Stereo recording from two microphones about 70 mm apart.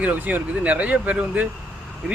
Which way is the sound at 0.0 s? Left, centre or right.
Right.